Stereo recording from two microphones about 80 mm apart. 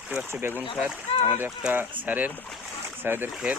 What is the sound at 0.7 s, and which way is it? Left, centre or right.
Speech, centre.